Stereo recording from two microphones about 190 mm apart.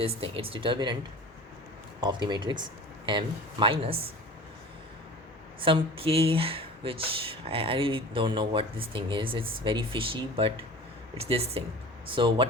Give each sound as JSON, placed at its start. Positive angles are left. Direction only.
{"t": 0.0, "sound": "speech", "side_deg": -30}
{"t": 2.0, "sound": "speech", "side_deg": -25}
{"t": 5.5, "sound": "speech", "side_deg": -25}